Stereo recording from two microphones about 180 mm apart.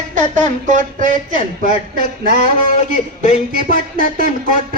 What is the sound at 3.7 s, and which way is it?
Speech, 55° right (ahead or behind).